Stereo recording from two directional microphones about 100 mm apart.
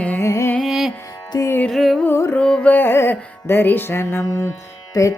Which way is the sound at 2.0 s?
25° left (ahead or behind).